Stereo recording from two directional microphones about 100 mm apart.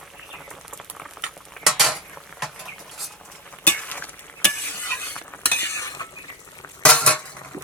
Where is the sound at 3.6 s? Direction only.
15° left (ahead or behind); by 6.1 s 35° left (ahead or behind).